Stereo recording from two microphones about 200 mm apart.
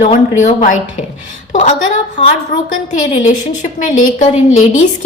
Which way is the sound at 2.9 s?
35° left (ahead or behind).